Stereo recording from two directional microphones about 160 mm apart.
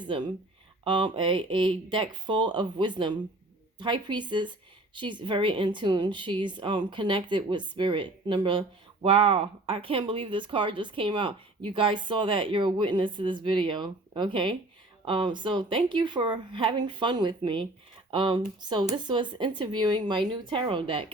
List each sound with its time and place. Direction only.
0.9 s a woman's voice: 30° right (ahead or behind)